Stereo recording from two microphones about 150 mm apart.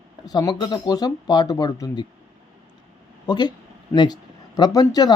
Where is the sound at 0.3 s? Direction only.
25° left (ahead or behind).